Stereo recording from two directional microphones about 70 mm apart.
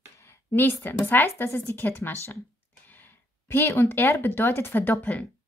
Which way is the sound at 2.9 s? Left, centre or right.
Left.